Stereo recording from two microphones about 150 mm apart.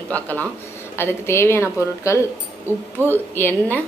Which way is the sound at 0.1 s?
10° left (ahead or behind).